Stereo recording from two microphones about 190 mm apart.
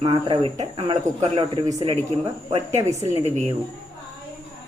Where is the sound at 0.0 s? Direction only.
25° right (ahead or behind).